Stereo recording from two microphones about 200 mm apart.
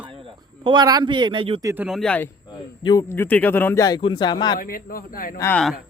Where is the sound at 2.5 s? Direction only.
20° left (ahead or behind).